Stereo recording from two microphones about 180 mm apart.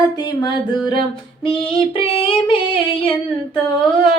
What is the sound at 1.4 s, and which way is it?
Female singing, 30° left (ahead or behind).